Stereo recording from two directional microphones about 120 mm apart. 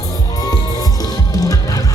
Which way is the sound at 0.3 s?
30° left (ahead or behind).